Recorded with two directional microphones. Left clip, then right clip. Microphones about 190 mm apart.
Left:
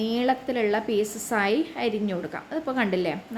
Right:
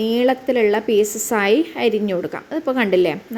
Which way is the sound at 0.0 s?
15° right (ahead or behind).